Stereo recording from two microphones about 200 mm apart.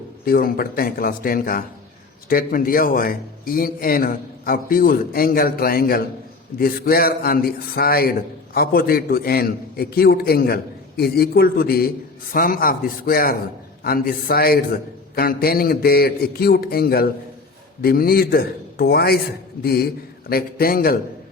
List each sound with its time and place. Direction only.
0.3 s a man's voice: 45° left (ahead or behind)